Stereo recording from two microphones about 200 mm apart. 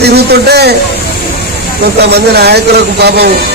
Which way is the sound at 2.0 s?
55° right (ahead or behind).